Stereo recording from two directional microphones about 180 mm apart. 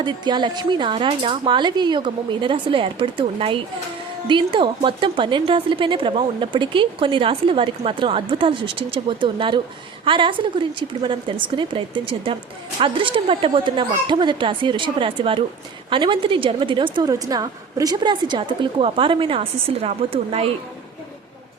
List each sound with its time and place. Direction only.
0.0 s a woman's voice: 25° right (ahead or behind)